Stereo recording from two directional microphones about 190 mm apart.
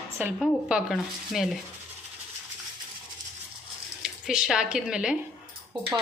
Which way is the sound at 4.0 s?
5° right (ahead or behind).